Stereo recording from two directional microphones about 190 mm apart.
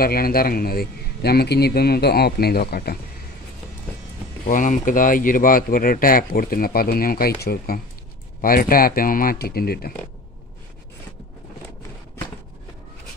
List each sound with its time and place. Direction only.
0.0 s speech: 50° left (ahead or behind)
4.5 s speech: 45° left (ahead or behind)